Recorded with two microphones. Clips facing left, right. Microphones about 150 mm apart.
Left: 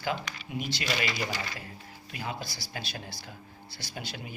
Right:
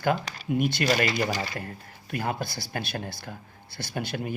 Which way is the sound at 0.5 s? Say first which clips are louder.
Right 9 dB; 55° right (ahead or behind).